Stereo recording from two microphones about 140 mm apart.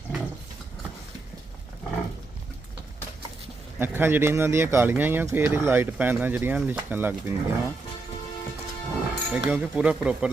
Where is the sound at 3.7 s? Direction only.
15° right (ahead or behind).